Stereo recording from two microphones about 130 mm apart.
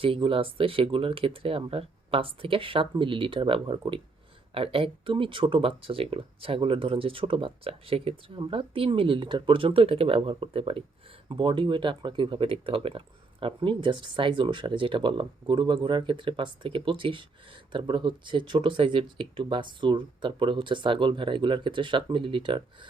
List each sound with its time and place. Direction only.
0.0 s speech: 45° right (ahead or behind)